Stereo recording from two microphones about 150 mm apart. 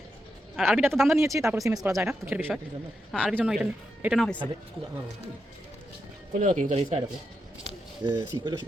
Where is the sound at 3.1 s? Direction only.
Centre (ahead or behind).